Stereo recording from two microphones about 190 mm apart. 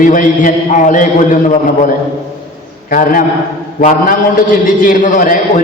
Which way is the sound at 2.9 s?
45° left (ahead or behind).